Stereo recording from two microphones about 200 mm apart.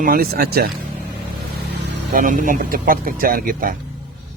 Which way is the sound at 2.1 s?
40° right (ahead or behind).